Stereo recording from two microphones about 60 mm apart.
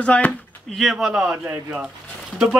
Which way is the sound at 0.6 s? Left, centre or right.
Centre.